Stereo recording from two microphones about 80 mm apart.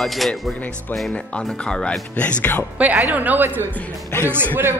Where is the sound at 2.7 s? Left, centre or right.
Centre.